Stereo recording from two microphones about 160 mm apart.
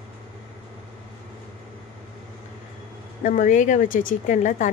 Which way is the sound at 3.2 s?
55° left (ahead or behind).